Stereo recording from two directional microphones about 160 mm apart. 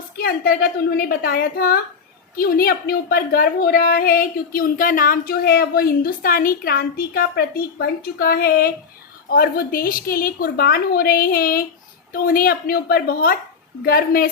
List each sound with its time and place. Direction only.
0.2 s a woman's voice: 70° left (ahead or behind)